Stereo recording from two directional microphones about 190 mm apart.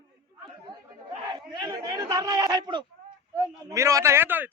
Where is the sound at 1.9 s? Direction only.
20° right (ahead or behind).